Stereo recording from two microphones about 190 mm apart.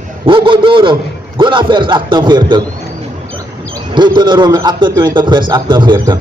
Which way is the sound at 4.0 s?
25° right (ahead or behind).